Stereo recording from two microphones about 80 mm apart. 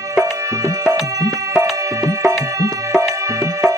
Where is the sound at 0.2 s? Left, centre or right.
Right.